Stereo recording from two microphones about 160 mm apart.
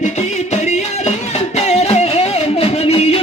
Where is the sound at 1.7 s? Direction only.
40° left (ahead or behind).